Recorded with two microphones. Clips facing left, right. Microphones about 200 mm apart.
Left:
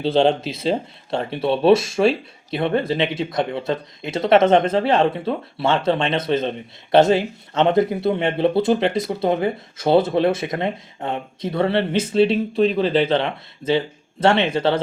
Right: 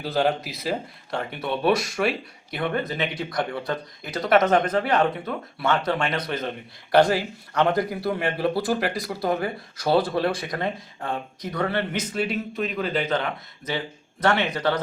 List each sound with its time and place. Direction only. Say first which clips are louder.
0.0 s speech: left 6 dB; 25° left (ahead or behind)